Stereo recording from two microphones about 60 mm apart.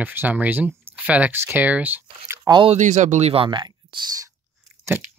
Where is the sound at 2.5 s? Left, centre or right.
Right.